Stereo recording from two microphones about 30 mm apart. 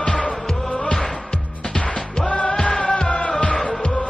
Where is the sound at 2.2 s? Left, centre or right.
Left.